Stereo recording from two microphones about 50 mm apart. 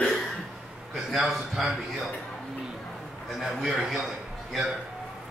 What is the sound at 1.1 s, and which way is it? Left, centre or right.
A man's voice, centre.